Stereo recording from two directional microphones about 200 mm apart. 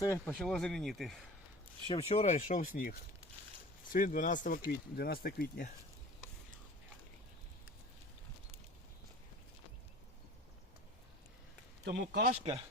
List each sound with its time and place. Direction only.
0.0 s speech: 15° left (ahead or behind)
0.3 s speech: 5° left (ahead or behind)
1.9 s speech: 30° left (ahead or behind); by 2.9 s 45° left (ahead or behind)
3.9 s speech: 45° left (ahead or behind)
11.9 s speech: 55° right (ahead or behind)